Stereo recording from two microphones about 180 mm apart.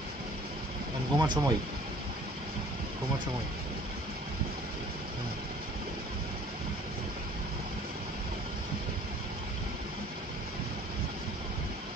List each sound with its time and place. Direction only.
1.1 s speech: 25° right (ahead or behind)